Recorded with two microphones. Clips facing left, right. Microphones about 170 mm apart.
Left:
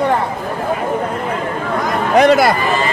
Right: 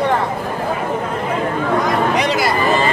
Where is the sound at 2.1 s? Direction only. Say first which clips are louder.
Left 7 dB; 50° left (ahead or behind).